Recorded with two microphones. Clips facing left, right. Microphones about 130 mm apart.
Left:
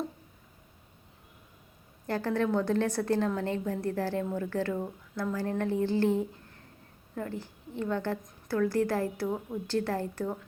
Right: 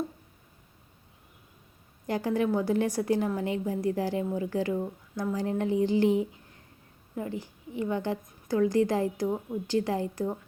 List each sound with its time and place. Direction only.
2.0 s a woman's voice: 15° right (ahead or behind)